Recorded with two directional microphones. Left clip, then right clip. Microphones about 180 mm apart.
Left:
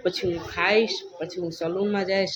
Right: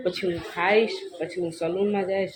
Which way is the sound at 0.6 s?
5° left (ahead or behind).